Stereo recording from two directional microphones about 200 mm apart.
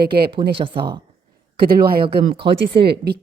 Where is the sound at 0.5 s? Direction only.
25° right (ahead or behind).